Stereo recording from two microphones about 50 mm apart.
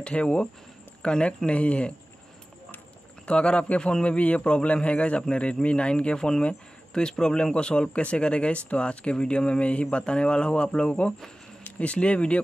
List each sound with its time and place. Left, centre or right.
0.0 s speech: left
3.3 s speech: left